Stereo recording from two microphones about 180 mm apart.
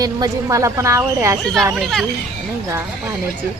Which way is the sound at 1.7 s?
Centre (ahead or behind).